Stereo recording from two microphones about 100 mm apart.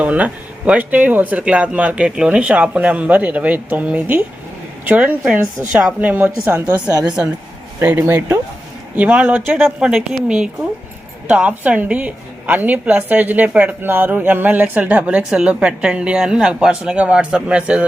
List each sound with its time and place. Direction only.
0.0 s a woman's voice: 15° right (ahead or behind)